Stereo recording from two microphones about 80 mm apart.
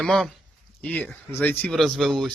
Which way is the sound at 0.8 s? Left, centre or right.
Left.